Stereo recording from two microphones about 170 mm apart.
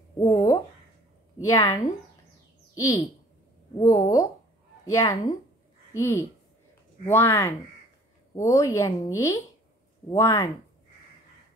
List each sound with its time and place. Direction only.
0.2 s speech: 20° left (ahead or behind)
2.7 s bird: 20° left (ahead or behind)
3.7 s speech: 20° left (ahead or behind)